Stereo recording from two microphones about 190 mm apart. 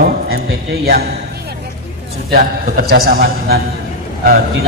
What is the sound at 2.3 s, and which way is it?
A man's voice, 50° right (ahead or behind).